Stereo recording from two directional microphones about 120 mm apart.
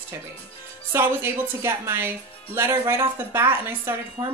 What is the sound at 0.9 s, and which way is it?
Speech, 20° right (ahead or behind).